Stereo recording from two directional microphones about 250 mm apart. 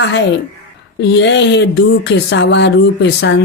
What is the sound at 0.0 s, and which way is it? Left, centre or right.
A woman's voice, left.